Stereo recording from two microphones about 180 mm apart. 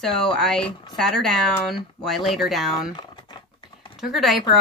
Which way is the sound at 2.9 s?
25° left (ahead or behind).